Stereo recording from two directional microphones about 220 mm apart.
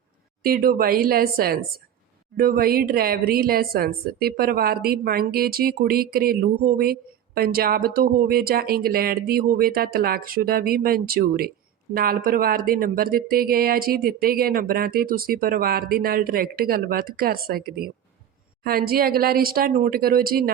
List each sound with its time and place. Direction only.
0.4 s a woman's voice: 40° right (ahead or behind)